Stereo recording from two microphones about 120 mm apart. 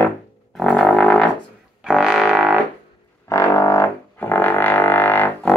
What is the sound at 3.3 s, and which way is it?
Music, 25° left (ahead or behind).